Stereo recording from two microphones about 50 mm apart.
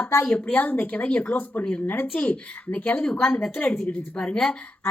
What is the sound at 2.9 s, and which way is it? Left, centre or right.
Speech, centre.